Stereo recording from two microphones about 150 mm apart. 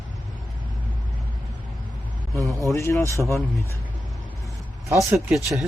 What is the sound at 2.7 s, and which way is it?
Speech, 20° left (ahead or behind).